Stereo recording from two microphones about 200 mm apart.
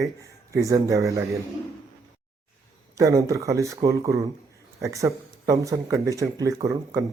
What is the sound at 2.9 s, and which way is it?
Speech, 15° right (ahead or behind).